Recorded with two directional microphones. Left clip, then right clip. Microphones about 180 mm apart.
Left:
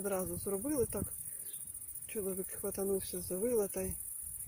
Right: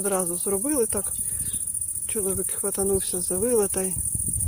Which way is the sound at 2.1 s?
5° right (ahead or behind).